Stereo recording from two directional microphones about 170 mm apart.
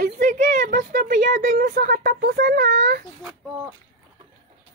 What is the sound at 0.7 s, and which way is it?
Speech, 55° right (ahead or behind).